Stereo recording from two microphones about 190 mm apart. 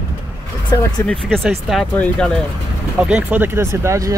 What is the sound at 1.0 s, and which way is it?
Speech, centre (ahead or behind).